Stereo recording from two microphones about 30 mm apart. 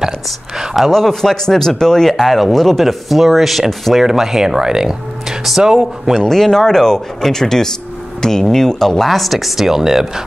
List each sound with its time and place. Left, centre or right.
0.9 s speech: centre
2.0 s speech: centre
4.0 s speech: centre
6.1 s speech: centre